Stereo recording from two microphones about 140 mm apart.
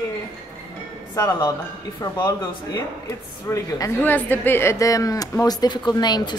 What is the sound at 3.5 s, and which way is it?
Speech, 20° left (ahead or behind).